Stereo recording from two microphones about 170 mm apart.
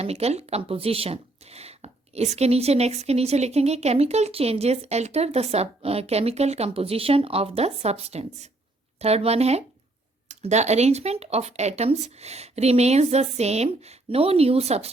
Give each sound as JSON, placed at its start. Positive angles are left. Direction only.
{"t": 0.0, "sound": "speech", "side_deg": -40}